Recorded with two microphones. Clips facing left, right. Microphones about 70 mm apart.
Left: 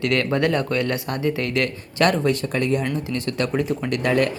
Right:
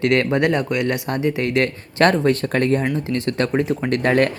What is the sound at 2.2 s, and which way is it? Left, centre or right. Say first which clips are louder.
Speech: right 3 dB; right.